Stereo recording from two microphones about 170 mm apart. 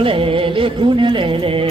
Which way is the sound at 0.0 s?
30° right (ahead or behind).